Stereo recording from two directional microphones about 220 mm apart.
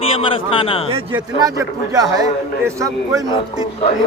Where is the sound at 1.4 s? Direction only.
15° right (ahead or behind).